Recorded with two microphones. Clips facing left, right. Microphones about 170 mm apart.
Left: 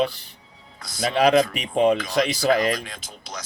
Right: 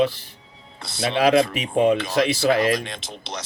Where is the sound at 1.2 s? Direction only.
5° right (ahead or behind).